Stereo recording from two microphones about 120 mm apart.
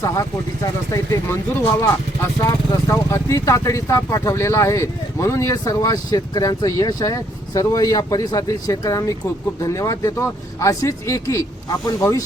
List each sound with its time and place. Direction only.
0.0 s speech: 30° left (ahead or behind)
2.4 s speech: 25° left (ahead or behind)